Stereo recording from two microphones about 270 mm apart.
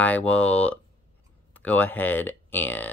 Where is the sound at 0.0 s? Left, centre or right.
Centre.